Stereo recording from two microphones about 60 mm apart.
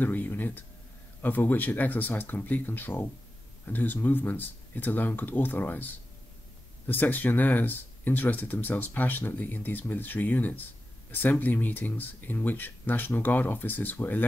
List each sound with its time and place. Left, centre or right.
0.0 s speech: left
6.9 s speech: left